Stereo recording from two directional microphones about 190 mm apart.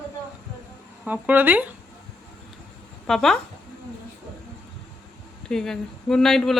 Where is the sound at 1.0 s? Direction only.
10° right (ahead or behind).